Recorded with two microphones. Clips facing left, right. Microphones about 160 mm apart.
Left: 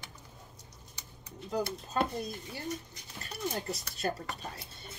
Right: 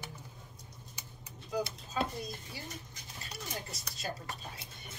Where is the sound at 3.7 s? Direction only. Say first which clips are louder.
Left 7 dB; 60° left (ahead or behind).